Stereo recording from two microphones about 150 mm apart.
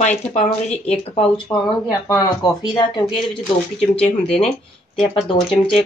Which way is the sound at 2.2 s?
30° left (ahead or behind).